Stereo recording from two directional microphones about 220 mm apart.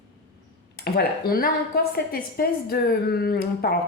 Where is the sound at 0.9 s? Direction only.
45° left (ahead or behind).